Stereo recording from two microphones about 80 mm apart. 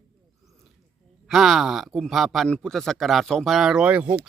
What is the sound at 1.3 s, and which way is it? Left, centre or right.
A man's voice, centre.